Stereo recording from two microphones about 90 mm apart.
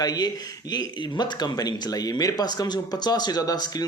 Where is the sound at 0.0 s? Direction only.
45° left (ahead or behind).